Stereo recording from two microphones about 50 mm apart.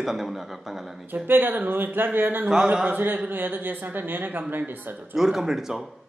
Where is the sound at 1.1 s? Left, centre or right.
Right.